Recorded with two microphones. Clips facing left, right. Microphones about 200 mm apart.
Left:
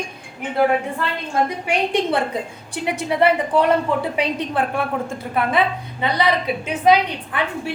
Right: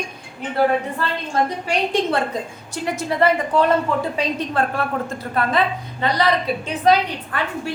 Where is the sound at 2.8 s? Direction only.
15° left (ahead or behind).